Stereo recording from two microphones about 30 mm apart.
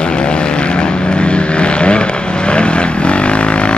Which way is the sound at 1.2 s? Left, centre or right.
Left.